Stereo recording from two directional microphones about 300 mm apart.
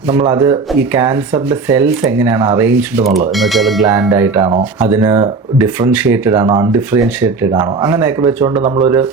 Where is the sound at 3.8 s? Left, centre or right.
Centre.